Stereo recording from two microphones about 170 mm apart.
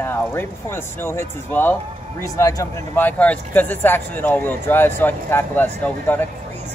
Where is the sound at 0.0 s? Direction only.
15° left (ahead or behind).